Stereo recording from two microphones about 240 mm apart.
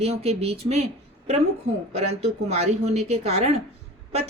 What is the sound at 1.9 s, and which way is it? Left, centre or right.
A woman's voice, right.